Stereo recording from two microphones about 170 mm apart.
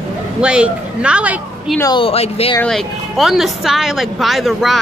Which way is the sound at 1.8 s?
25° left (ahead or behind).